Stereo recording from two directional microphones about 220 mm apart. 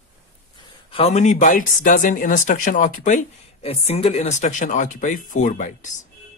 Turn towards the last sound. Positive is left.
turn(degrees=35)  # may be behind; listen again after turning